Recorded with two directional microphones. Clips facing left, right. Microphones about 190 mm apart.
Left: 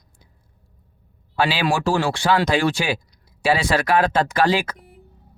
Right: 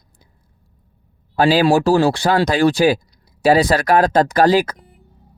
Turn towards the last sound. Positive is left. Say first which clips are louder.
# right 6 dB
turn(degrees=-40)  # may be behind; listen again after turning